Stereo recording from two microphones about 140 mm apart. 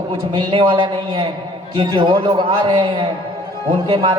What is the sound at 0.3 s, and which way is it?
Speech, 35° right (ahead or behind).